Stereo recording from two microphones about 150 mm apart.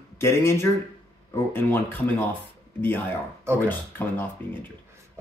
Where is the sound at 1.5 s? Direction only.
15° left (ahead or behind).